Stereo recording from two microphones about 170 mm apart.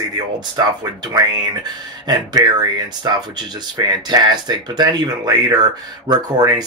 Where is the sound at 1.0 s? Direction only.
25° right (ahead or behind).